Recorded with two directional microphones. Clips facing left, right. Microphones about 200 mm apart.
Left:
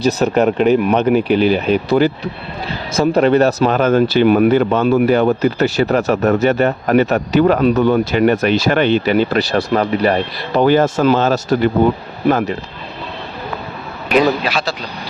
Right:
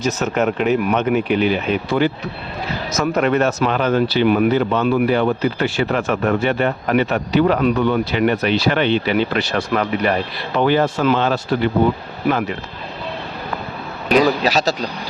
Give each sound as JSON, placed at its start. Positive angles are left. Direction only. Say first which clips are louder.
{"t": 0.0, "sound": "speech", "louder": "left 5 dB", "side_deg": 35}
{"t": 14.4, "sound": "speech", "louder": "right 3 dB", "side_deg": -40}